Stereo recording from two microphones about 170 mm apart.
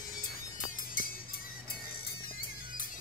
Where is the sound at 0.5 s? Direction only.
55° left (ahead or behind).